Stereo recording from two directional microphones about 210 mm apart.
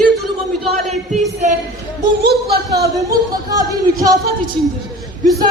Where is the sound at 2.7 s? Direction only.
15° right (ahead or behind).